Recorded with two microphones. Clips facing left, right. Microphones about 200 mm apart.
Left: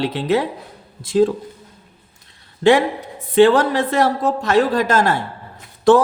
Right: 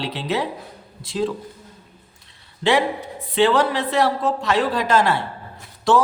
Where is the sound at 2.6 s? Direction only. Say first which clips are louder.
Left 5 dB; 45° left (ahead or behind).